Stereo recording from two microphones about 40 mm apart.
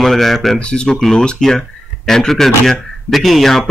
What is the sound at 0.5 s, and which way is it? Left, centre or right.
Speech, left.